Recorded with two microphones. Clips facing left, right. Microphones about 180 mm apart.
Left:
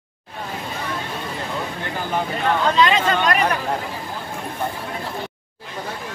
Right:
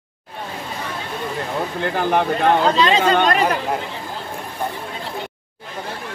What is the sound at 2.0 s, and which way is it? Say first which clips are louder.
Speech: right 6 dB; 65° right (ahead or behind).